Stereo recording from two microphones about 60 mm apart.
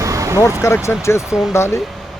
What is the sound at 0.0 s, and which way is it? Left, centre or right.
Vehicle, right.